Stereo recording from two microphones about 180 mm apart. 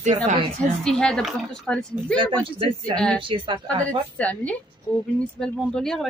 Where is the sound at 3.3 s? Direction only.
30° right (ahead or behind).